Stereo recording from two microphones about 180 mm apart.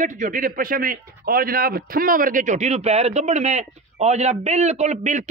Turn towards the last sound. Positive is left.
turn(degrees=-40)  # may be behind; listen again after turning